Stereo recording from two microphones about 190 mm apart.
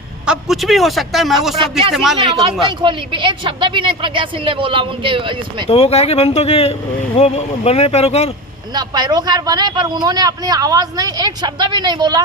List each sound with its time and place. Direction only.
0.3 s speech: centre (ahead or behind)
2.6 s speech: 25° right (ahead or behind)
5.6 s speech: 30° left (ahead or behind)
8.7 s speech: 20° right (ahead or behind)